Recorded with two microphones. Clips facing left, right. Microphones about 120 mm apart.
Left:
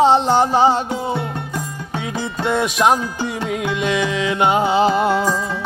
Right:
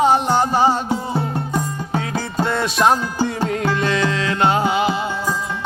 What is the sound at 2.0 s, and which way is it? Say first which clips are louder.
Music: even; 20° left (ahead or behind).